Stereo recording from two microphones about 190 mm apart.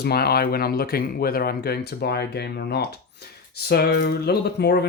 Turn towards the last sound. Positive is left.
turn(degrees=60)  # may be behind; listen again after turning